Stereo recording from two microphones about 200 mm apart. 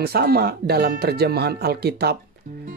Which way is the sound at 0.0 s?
50° right (ahead or behind).